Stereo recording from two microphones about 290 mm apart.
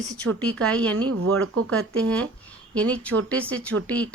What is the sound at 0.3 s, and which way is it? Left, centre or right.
Speech, centre.